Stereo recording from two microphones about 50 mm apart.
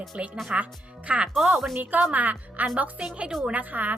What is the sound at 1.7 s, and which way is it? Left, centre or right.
A woman's voice, right.